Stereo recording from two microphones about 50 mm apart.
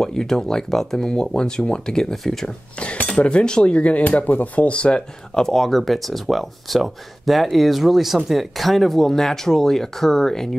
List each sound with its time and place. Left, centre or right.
0.0 s speech: centre
2.8 s speech: left
4.6 s speech: left
5.4 s speech: centre